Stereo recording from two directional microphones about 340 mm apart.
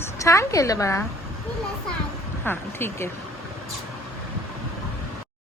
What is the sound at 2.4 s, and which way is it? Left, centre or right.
Speech, centre.